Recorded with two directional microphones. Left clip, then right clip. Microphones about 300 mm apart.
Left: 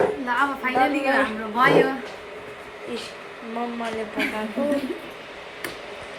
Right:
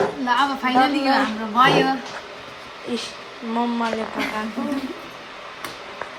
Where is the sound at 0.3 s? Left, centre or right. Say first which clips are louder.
Right 3 dB; right.